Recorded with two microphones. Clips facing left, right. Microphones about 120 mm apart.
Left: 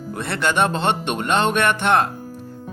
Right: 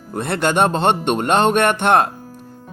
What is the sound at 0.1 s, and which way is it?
Speech, 45° right (ahead or behind).